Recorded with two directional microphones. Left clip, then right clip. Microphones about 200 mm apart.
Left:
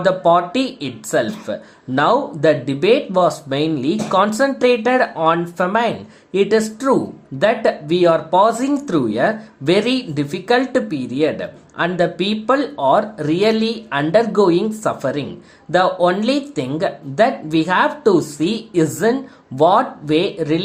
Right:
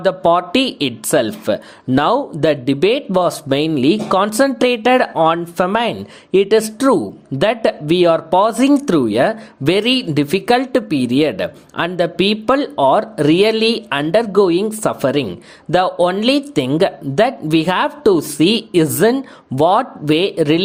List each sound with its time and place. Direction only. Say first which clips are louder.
0.0 s speech: even; 40° right (ahead or behind)